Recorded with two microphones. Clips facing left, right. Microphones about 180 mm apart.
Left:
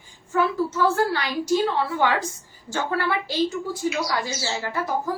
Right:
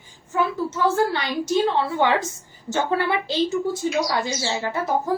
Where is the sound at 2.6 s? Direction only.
20° right (ahead or behind).